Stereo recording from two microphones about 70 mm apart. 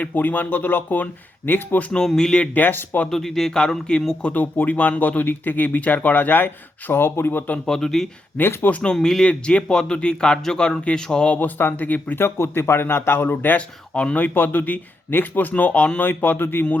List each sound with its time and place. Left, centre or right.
0.0 s speech: left
1.9 s speech: centre
2.6 s speech: left
3.1 s speech: centre
4.3 s speech: left
7.6 s speech: centre
8.4 s speech: left
8.8 s speech: centre
11.3 s speech: left